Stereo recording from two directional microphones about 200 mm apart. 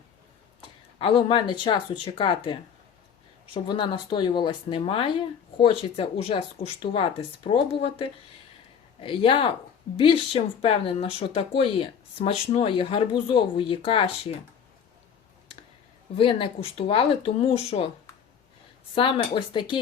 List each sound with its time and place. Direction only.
0.9 s speech: 25° left (ahead or behind)
16.1 s speech: 25° left (ahead or behind)
18.9 s speech: 25° left (ahead or behind)